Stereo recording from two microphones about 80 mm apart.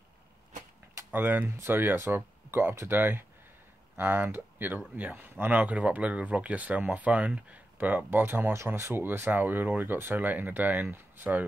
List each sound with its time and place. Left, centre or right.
1.1 s speech: right